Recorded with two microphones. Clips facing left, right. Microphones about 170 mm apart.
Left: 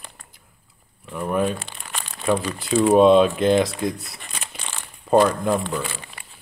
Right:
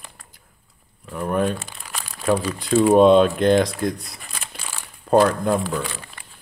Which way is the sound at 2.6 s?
Centre (ahead or behind).